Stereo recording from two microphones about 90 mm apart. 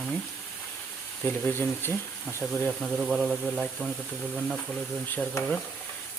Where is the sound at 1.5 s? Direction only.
25° left (ahead or behind).